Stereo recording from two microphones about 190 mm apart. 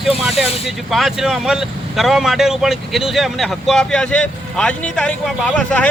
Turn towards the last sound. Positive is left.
turn(degrees=5)  # may be behind; listen again after turning